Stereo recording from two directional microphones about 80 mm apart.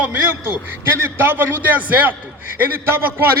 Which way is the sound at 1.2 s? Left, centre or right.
Right.